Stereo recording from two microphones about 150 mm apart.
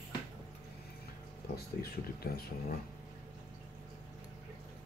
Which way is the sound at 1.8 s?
90° left.